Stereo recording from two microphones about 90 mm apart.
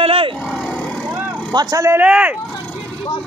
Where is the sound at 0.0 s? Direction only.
90° right.